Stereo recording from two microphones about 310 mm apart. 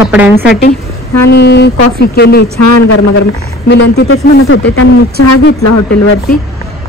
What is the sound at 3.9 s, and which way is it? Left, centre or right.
Speech, left.